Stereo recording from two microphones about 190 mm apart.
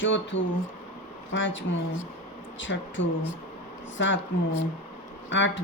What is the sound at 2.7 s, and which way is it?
Speech, 70° left (ahead or behind).